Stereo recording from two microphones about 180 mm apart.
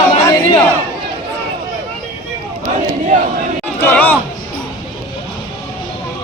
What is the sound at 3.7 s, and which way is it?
Speech, 10° left (ahead or behind).